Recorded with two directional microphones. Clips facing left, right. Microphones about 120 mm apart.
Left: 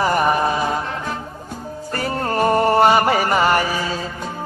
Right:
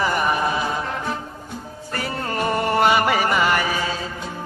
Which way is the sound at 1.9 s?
40° left (ahead or behind).